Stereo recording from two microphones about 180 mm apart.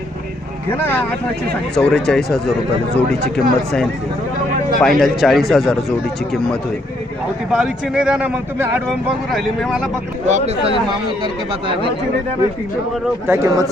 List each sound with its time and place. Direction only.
0.7 s a man's voice: 10° left (ahead or behind)
7.5 s a man's voice: 5° right (ahead or behind)
9.3 s a man's voice: centre (ahead or behind)
10.2 s speech: 40° right (ahead or behind)
13.2 s speech: 15° right (ahead or behind)